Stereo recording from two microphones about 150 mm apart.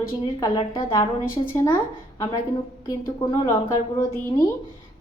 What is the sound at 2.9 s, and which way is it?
Speech, 25° left (ahead or behind).